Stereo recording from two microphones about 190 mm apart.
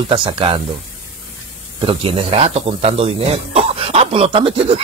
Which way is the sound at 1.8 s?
30° right (ahead or behind).